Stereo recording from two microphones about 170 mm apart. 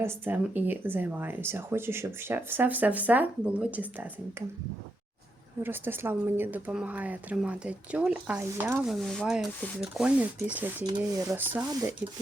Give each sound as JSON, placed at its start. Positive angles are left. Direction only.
{"t": 0.0, "sound": "speech", "side_deg": -10}
{"t": 5.6, "sound": "speech", "side_deg": -10}